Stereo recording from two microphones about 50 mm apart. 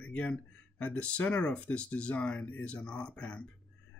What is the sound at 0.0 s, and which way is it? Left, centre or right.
Speech, left.